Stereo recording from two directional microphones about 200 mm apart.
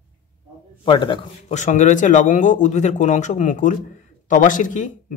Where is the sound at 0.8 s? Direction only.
25° left (ahead or behind).